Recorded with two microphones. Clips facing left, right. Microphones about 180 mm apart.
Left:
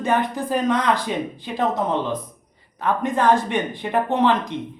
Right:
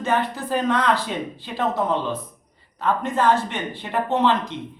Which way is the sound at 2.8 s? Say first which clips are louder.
Left 1 dB; 15° left (ahead or behind).